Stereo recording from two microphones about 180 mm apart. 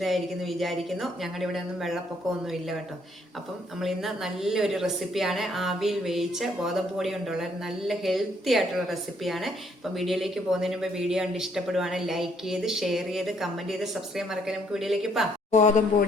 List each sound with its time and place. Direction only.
0.0 s speech: centre (ahead or behind)
3.8 s speech: centre (ahead or behind)
15.6 s speech: 45° left (ahead or behind)